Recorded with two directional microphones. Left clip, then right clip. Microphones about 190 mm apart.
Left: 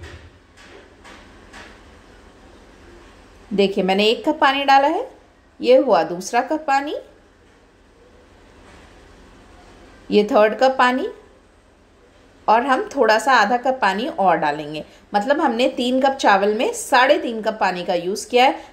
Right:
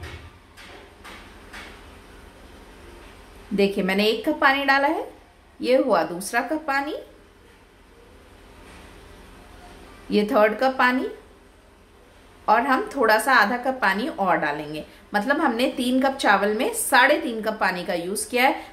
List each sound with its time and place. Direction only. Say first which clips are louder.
3.5 s a woman's voice: left 4 dB; 15° left (ahead or behind)
10.0 s speech: left 4 dB; 20° left (ahead or behind)
12.4 s a woman's voice: left 3 dB; 15° left (ahead or behind)